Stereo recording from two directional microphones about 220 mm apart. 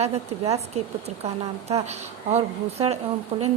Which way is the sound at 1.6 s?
30° right (ahead or behind).